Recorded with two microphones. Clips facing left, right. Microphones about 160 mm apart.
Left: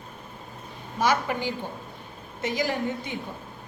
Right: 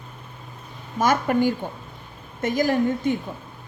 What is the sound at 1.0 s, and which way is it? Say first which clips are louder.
A woman's voice: right 5 dB; 50° right (ahead or behind).